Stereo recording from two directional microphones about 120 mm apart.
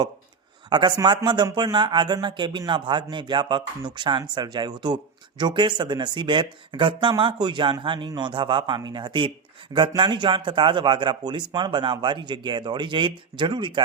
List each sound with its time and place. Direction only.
0.7 s speech: 40° right (ahead or behind)